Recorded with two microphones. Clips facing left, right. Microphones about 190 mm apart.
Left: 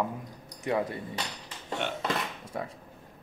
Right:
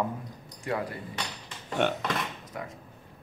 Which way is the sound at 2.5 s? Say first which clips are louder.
Left 3 dB; 30° left (ahead or behind).